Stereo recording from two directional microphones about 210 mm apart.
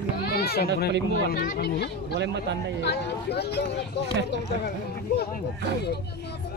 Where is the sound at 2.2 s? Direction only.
55° right (ahead or behind).